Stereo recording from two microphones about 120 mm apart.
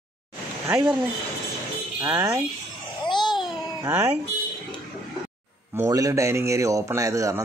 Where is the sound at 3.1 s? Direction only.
40° left (ahead or behind).